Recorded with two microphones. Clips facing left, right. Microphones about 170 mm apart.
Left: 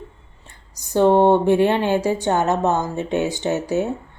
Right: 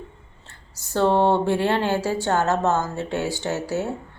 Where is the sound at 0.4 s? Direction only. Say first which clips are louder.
Left 1 dB; 15° left (ahead or behind).